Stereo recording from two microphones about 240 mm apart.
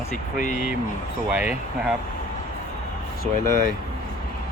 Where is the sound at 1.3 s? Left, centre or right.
Centre.